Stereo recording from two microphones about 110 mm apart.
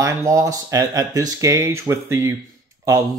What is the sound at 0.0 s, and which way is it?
Speech, 30° right (ahead or behind).